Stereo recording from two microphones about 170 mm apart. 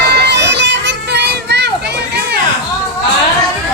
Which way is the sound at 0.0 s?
75° right (ahead or behind).